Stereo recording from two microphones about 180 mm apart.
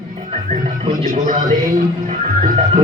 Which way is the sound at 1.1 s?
45° right (ahead or behind).